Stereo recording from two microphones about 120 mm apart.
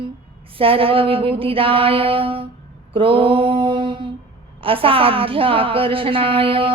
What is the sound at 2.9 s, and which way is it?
Mantra, 45° right (ahead or behind).